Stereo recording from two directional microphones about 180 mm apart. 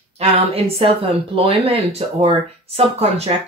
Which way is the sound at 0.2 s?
35° right (ahead or behind).